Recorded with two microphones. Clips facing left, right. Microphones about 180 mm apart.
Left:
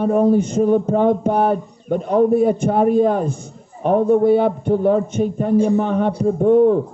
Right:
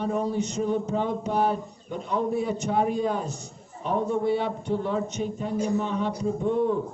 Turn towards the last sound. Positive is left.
turn(degrees=50)  # may be behind; listen again after turning